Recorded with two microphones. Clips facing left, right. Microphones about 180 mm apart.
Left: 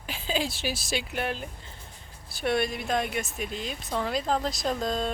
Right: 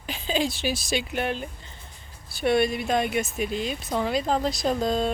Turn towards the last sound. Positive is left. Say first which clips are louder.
# right 4 dB
turn(degrees=0)  # may be behind; listen again after turning